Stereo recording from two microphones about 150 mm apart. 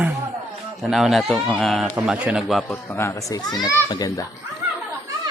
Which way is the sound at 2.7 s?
15° left (ahead or behind).